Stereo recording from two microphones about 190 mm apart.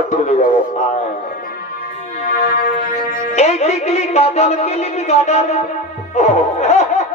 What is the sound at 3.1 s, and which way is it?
Music, 40° left (ahead or behind).